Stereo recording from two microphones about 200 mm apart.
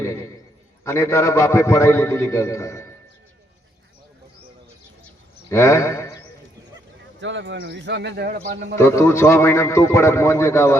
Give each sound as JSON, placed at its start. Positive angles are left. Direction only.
{"t": 0.0, "sound": "a man's voice", "side_deg": 15}
{"t": 5.0, "sound": "a sound", "side_deg": 15}
{"t": 7.2, "sound": "a man's voice", "side_deg": -70}
{"t": 8.8, "sound": "a man's voice", "side_deg": 15}